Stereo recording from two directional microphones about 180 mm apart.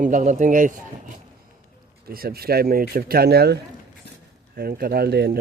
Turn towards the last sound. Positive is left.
turn(degrees=-65)  # may be behind; listen again after turning